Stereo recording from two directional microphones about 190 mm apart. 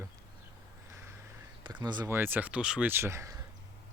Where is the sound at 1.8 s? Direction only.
20° right (ahead or behind).